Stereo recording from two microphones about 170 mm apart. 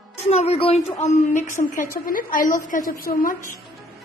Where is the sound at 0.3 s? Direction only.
35° left (ahead or behind); by 3.5 s 55° left (ahead or behind).